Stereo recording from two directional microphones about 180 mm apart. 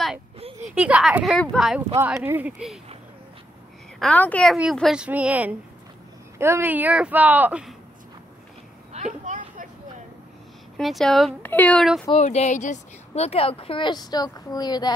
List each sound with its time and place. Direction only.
0.7 s speech: 5° right (ahead or behind)
2.0 s speech: 15° right (ahead or behind)
4.0 s a woman's voice: 10° left (ahead or behind); by 7.7 s 10° right (ahead or behind)
8.9 s a sound: 40° right (ahead or behind)
10.8 s speech: centre (ahead or behind)
12.1 s speech: 35° left (ahead or behind); by 14.9 s 20° left (ahead or behind)